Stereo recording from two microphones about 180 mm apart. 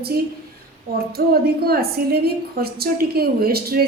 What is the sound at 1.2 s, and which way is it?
A woman's voice, 60° right (ahead or behind).